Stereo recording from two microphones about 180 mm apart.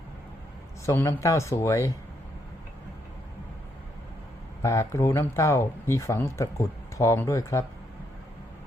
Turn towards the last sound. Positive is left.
turn(degrees=15)  # may be behind; listen again after turning